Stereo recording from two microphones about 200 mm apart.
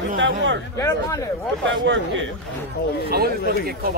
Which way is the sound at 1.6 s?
65° right (ahead or behind).